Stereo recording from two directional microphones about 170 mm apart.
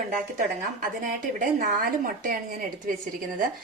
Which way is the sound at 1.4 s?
50° right (ahead or behind).